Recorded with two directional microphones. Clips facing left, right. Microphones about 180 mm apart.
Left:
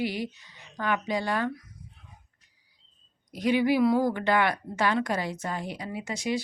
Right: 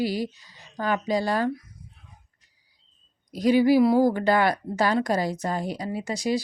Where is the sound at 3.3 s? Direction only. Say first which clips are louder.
Right 5 dB; 35° right (ahead or behind).